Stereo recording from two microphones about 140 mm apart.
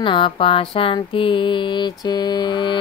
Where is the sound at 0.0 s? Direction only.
35° left (ahead or behind).